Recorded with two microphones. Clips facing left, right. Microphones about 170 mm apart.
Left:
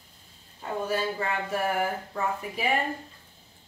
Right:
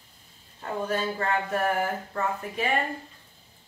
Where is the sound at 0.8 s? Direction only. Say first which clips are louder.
Right 1 dB; 5° left (ahead or behind).